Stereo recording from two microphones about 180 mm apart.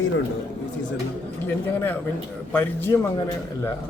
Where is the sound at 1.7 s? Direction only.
10° left (ahead or behind).